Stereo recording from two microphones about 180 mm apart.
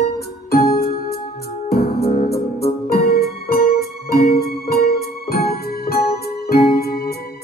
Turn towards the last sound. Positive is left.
turn(degrees=60)  # may be behind; listen again after turning